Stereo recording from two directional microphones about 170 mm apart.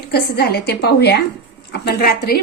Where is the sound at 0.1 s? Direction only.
70° left (ahead or behind).